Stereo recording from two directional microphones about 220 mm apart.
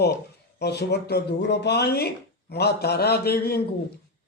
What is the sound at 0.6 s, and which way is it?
A man's voice, 50° left (ahead or behind).